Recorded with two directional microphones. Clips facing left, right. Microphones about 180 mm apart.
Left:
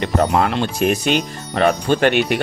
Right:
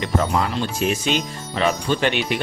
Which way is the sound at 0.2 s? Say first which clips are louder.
Left 5 dB; 60° left (ahead or behind).